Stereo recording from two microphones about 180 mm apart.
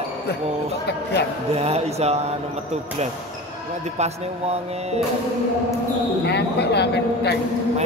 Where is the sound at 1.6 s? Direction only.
35° right (ahead or behind).